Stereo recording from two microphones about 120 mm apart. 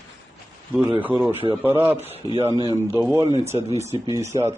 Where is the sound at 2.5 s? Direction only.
35° right (ahead or behind).